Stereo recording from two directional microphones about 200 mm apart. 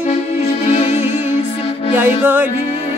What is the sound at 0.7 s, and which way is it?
Music, 35° left (ahead or behind).